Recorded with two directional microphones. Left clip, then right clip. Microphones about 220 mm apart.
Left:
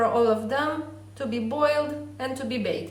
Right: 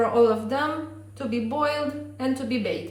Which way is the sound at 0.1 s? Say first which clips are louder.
Right 2 dB; 15° left (ahead or behind).